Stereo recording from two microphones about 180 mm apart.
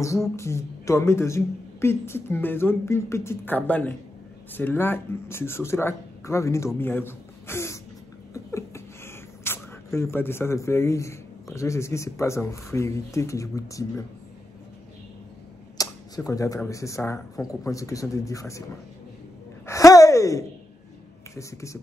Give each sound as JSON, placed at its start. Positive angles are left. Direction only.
{"t": 0.4, "sound": "a woman's voice", "side_deg": 15}
{"t": 15.8, "sound": "a woman's voice", "side_deg": 20}
{"t": 19.6, "sound": "gasp", "side_deg": 15}
{"t": 21.4, "sound": "a woman's voice", "side_deg": 15}